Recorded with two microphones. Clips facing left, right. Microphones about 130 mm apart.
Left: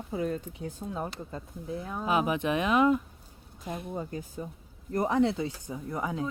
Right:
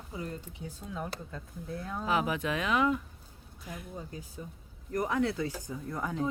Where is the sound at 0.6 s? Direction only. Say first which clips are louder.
Left 3 dB; 45° left (ahead or behind).